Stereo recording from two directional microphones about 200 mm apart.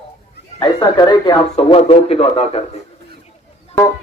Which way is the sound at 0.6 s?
20° left (ahead or behind).